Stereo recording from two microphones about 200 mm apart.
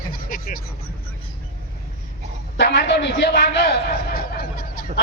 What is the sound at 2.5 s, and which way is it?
A man's voice, 60° left (ahead or behind).